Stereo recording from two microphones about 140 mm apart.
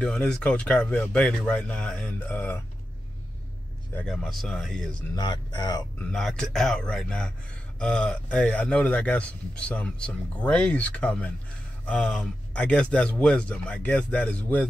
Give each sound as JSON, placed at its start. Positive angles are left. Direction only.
{"t": 0.0, "sound": "a man's voice", "side_deg": 5}
{"t": 3.9, "sound": "a man's voice", "side_deg": 5}
{"t": 5.1, "sound": "speech", "side_deg": 35}
{"t": 6.0, "sound": "a man's voice", "side_deg": 5}